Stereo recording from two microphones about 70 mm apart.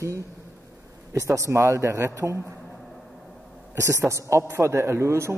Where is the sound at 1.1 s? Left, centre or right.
Right.